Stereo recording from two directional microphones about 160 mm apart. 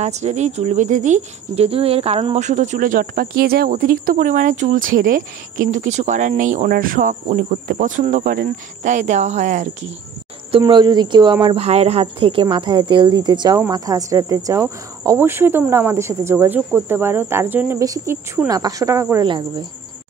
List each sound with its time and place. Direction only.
0.0 s speech: 45° right (ahead or behind)
10.5 s speech: 30° right (ahead or behind)
11.4 s speech: 40° right (ahead or behind); by 19.2 s 20° right (ahead or behind)
19.2 s speech: 30° right (ahead or behind)